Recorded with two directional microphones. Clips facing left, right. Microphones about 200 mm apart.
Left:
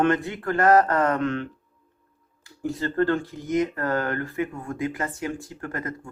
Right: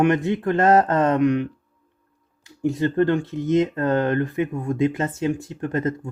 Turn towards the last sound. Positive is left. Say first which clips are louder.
# right 8 dB
turn(degrees=-20)  # may be behind; listen again after turning